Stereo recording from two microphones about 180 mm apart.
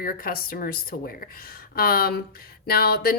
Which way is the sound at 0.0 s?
55° left (ahead or behind).